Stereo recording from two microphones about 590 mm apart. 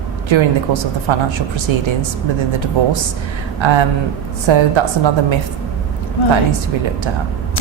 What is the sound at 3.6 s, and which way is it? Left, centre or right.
A woman's voice, right.